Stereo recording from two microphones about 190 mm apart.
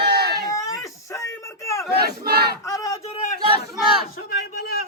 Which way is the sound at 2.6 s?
20° left (ahead or behind).